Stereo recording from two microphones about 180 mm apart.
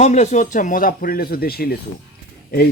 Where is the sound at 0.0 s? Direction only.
40° left (ahead or behind).